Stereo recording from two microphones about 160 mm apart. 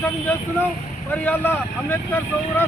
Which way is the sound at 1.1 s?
10° left (ahead or behind).